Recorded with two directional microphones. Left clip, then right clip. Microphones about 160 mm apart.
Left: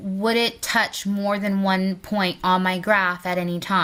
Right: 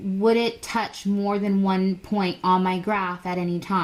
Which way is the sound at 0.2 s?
15° left (ahead or behind).